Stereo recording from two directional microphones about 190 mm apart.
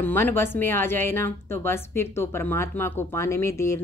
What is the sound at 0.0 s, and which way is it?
A woman's voice, 10° left (ahead or behind).